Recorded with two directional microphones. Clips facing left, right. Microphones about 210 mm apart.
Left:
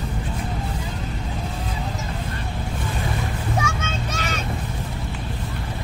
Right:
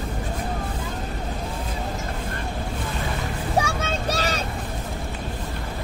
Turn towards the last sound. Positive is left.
turn(degrees=-35)  # may be behind; listen again after turning